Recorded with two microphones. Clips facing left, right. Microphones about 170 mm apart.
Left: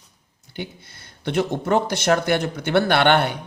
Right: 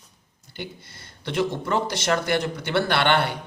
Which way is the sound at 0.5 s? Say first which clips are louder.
Left 3 dB; 55° left (ahead or behind).